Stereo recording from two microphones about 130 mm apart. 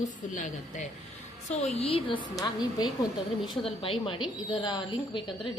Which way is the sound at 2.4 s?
30° left (ahead or behind).